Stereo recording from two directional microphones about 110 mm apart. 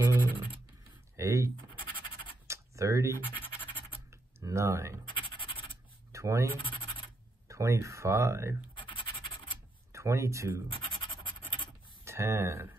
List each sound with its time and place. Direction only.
0.0 s scratch: 20° right (ahead or behind)
1.1 s a sound: 25° right (ahead or behind)
1.9 s scratch: 50° left (ahead or behind)
2.4 s scratch: 25° right (ahead or behind)
4.4 s speech: 30° right (ahead or behind)
5.1 s scratch: 50° left (ahead or behind)
6.1 s bleat: 30° right (ahead or behind)
6.6 s scratch: 50° left (ahead or behind)
7.4 s speech: 25° right (ahead or behind)
8.7 s scratch: 50° left (ahead or behind)
9.9 s speech: 25° right (ahead or behind)
10.7 s scratch: 50° left (ahead or behind)
12.0 s speech: 25° right (ahead or behind)